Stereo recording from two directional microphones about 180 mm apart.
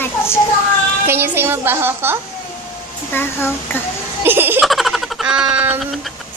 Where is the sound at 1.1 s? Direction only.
10° right (ahead or behind).